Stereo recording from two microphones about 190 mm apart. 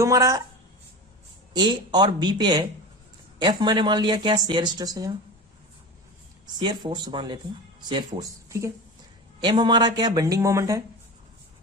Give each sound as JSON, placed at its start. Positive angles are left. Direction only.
{"t": 0.0, "sound": "speech", "side_deg": -15}
{"t": 1.5, "sound": "speech", "side_deg": -20}
{"t": 6.6, "sound": "speech", "side_deg": -25}